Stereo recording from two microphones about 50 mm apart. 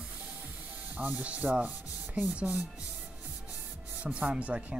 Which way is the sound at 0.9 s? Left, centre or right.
Right.